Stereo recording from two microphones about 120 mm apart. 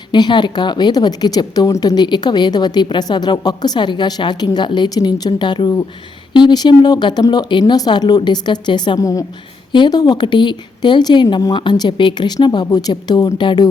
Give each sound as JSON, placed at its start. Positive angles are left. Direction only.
{"t": 0.1, "sound": "a woman's voice", "side_deg": 40}